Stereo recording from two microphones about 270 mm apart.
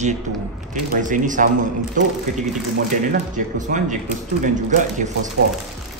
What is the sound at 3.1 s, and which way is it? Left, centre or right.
Speech, right.